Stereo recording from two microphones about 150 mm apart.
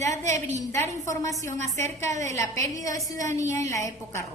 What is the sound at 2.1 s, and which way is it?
Speech, 50° right (ahead or behind).